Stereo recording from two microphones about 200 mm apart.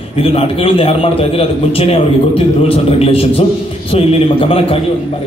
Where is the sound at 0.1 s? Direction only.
30° left (ahead or behind).